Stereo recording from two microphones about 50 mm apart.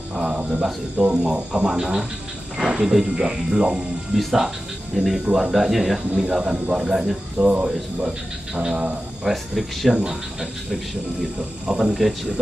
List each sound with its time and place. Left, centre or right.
0.1 s speech: centre
2.5 s a sound: centre
2.8 s speech: centre
4.2 s speech: centre
7.3 s speech: right
9.2 s speech: centre